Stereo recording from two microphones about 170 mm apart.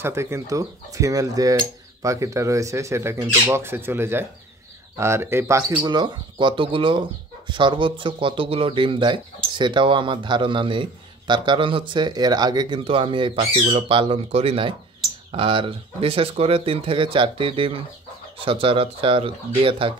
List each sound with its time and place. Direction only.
0.0 s speech: 15° right (ahead or behind); by 19.9 s 30° right (ahead or behind)